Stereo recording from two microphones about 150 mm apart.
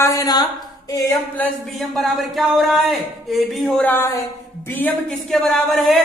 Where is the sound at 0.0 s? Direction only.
20° left (ahead or behind).